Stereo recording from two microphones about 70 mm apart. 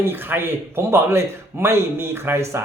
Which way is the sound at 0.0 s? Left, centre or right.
Right.